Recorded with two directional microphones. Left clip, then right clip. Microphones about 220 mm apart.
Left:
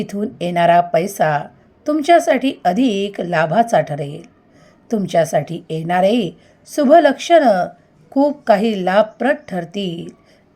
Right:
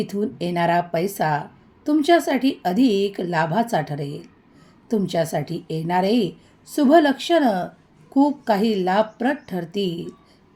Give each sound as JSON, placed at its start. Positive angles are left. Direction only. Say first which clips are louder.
{"t": 0.0, "sound": "a woman's voice", "louder": "left 3 dB", "side_deg": 20}